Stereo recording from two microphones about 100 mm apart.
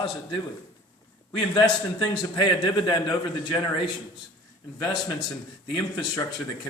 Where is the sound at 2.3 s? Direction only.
50° left (ahead or behind).